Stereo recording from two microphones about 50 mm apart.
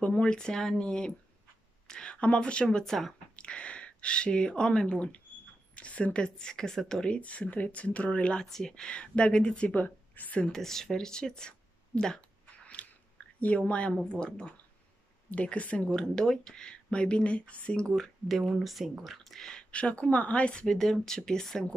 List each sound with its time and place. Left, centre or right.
0.1 s speech: centre
2.6 s speech: centre
3.3 s speech: left
7.2 s speech: left
8.5 s speech: centre
9.8 s a woman's voice: left
10.4 s speech: centre; by 15.9 s left
15.9 s speech: centre
17.9 s speech: centre
19.4 s speech: centre
19.8 s speech: left
20.6 s speech: centre